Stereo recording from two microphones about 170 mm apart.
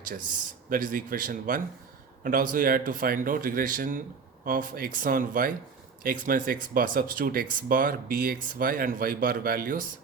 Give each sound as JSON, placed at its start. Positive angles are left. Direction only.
{"t": 0.7, "sound": "speech", "side_deg": -55}